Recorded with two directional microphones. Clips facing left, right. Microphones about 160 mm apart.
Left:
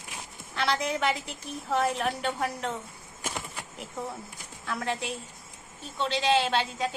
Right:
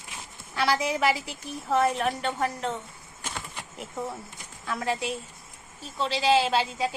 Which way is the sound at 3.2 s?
10° left (ahead or behind).